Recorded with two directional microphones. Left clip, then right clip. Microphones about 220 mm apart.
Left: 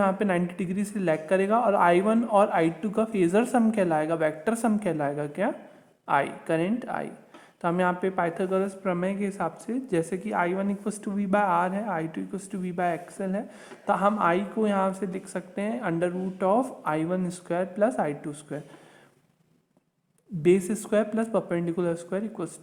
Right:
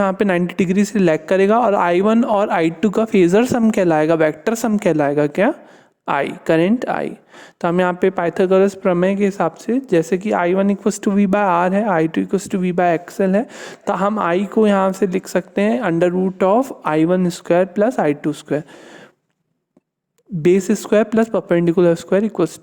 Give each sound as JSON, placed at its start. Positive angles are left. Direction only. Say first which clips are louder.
{"t": 0.0, "sound": "speech", "louder": "right 8 dB", "side_deg": -45}
{"t": 20.4, "sound": "a man's voice", "louder": "right 8 dB", "side_deg": -40}